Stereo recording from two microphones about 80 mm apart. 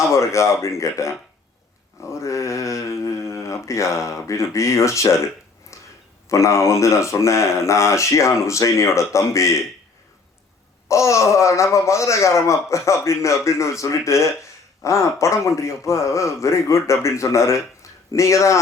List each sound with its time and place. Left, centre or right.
0.1 s speech: left
5.7 s a sound: left
6.2 s speech: left
10.8 s speech: left